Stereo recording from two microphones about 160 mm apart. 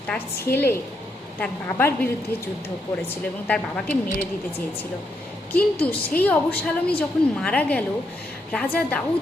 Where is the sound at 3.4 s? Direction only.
10° left (ahead or behind).